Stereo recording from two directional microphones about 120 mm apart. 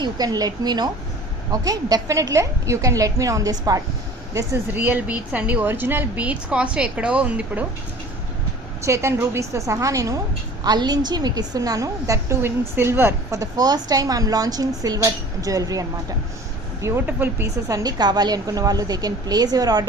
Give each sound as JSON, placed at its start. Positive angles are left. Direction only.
{"t": 0.0, "sound": "a woman's voice", "side_deg": -35}
{"t": 4.4, "sound": "a woman's voice", "side_deg": -20}
{"t": 8.8, "sound": "a woman's voice", "side_deg": -25}
{"t": 17.1, "sound": "a woman's voice", "side_deg": -15}
{"t": 17.7, "sound": "a woman's voice", "side_deg": -30}